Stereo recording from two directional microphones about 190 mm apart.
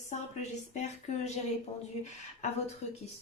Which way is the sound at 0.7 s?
35° left (ahead or behind).